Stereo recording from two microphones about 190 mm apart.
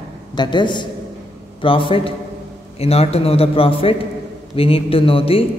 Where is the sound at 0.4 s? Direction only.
25° left (ahead or behind).